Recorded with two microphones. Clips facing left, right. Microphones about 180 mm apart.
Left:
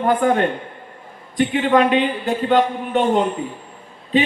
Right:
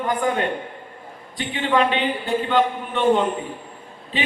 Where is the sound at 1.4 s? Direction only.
45° left (ahead or behind).